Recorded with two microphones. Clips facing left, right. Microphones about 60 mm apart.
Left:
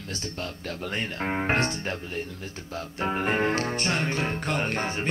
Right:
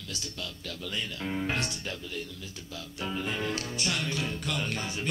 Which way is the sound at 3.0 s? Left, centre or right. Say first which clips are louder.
Left 8 dB; left.